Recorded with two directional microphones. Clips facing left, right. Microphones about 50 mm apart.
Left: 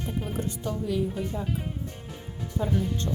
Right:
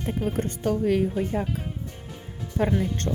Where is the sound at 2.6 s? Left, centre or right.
Right.